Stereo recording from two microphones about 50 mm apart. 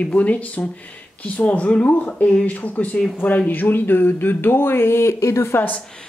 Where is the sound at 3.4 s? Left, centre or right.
Left.